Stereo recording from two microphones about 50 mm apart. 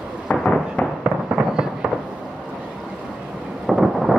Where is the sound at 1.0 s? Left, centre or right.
Centre.